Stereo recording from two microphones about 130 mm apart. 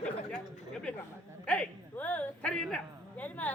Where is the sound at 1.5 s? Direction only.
10° left (ahead or behind).